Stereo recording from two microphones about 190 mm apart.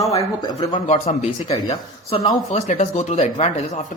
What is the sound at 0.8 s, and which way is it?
Speech, 35° left (ahead or behind).